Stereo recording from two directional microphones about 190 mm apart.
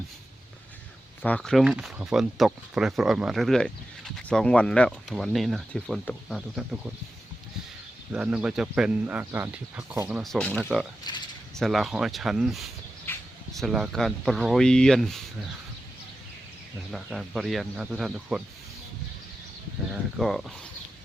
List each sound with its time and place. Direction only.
1.2 s speech: 5° left (ahead or behind)
8.1 s speech: 5° right (ahead or behind)
11.1 s speech: 20° left (ahead or behind)
11.5 s speech: centre (ahead or behind)
13.1 s a sound: 10° left (ahead or behind)
13.5 s speech: centre (ahead or behind)
16.9 s speech: centre (ahead or behind)
20.1 s speech: centre (ahead or behind)